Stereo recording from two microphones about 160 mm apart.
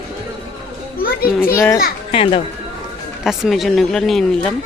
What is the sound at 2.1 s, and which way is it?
Speech, 35° left (ahead or behind).